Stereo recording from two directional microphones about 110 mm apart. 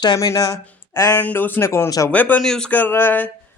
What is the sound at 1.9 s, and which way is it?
Speech, 30° left (ahead or behind).